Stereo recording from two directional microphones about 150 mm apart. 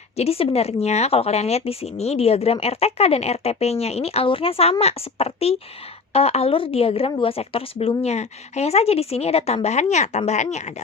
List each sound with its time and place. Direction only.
0.2 s a woman's voice: 45° left (ahead or behind)